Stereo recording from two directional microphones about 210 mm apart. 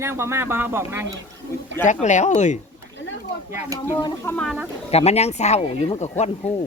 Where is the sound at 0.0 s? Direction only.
10° right (ahead or behind).